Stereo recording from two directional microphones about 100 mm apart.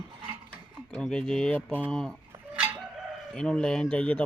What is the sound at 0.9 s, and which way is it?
Speech, 5° left (ahead or behind).